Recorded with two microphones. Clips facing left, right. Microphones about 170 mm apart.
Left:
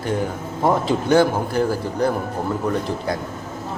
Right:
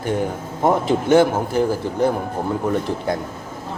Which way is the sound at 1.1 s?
20° right (ahead or behind).